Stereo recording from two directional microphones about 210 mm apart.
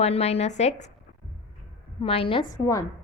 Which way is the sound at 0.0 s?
30° left (ahead or behind).